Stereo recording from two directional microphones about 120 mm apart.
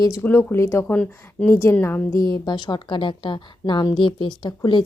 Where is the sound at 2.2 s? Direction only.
35° left (ahead or behind).